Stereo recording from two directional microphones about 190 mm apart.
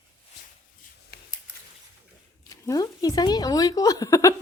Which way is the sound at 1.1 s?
55° left (ahead or behind).